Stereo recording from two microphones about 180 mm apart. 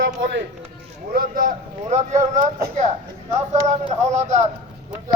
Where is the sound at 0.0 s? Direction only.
85° right.